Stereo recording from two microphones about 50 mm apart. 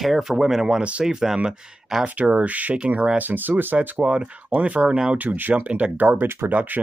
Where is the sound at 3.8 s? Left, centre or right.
Right.